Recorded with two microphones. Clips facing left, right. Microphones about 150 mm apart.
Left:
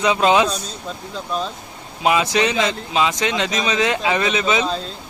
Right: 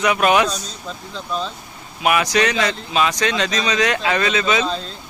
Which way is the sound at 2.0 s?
25° left (ahead or behind).